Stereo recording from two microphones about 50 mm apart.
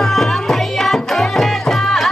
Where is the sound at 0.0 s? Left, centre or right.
Centre.